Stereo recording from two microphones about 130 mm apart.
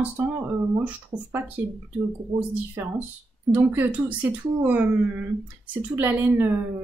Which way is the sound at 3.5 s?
15° right (ahead or behind).